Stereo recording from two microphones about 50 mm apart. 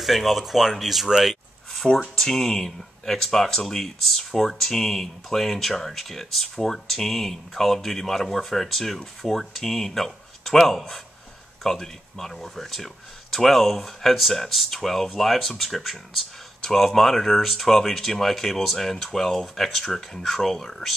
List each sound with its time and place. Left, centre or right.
0.0 s speech: centre
1.2 s a sound: centre
2.1 s speech: centre